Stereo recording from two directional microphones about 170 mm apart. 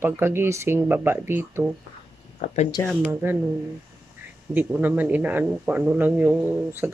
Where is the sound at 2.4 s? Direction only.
45° left (ahead or behind).